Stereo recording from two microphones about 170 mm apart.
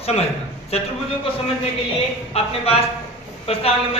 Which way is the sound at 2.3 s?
35° left (ahead or behind).